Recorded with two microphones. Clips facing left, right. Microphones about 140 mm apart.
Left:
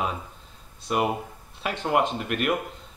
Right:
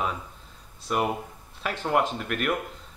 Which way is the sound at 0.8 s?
15° left (ahead or behind).